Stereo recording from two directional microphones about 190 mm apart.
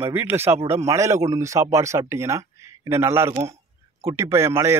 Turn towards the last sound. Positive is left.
turn(degrees=-15)  # may be behind; listen again after turning